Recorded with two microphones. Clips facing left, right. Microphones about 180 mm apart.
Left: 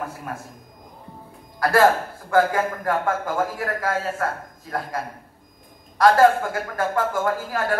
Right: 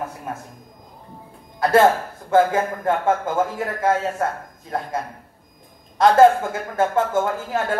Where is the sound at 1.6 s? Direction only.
25° right (ahead or behind).